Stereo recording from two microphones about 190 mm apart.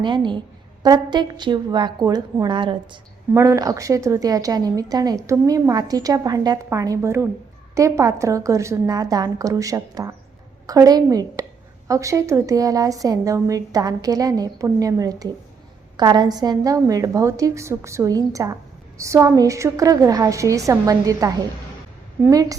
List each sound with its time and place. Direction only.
0.0 s a woman's voice: 25° right (ahead or behind)